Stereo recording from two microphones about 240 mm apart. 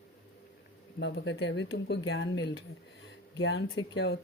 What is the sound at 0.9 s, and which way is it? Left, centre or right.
Speech, left.